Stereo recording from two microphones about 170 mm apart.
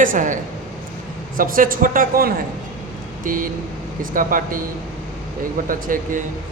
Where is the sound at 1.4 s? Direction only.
55° right (ahead or behind).